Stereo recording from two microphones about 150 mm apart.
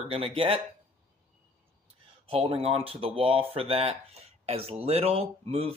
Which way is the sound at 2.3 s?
40° right (ahead or behind).